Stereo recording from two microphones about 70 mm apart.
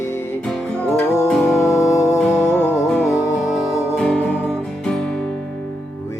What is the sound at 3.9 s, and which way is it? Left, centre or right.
Music, centre.